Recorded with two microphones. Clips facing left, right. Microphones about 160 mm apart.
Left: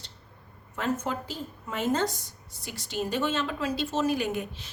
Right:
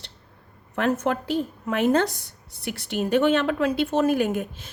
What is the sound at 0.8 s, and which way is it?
A woman's voice, 70° right (ahead or behind).